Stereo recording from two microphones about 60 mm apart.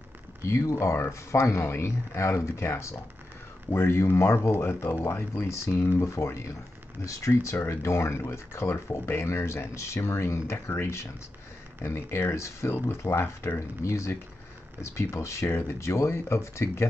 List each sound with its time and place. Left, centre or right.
0.4 s speech: left
5.0 s speech: left
13.6 s speech: left